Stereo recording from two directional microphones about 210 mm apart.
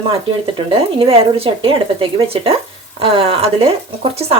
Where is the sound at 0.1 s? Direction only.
25° right (ahead or behind).